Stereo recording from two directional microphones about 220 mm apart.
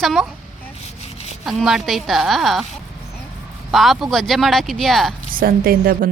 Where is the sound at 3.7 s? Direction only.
Centre (ahead or behind).